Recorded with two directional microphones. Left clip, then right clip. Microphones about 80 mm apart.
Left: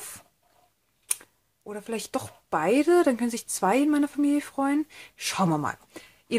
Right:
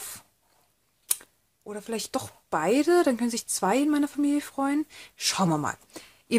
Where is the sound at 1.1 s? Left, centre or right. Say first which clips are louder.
Right 1 dB; centre.